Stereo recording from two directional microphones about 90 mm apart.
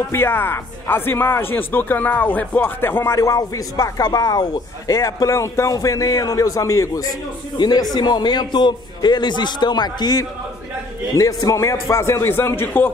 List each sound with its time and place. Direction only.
0.1 s a man's voice: 25° left (ahead or behind)
3.2 s a man's voice: 40° left (ahead or behind)
7.5 s a man's voice: 50° left (ahead or behind); by 12.9 s 25° left (ahead or behind)